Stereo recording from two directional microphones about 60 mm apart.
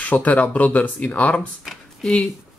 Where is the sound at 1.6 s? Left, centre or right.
Centre.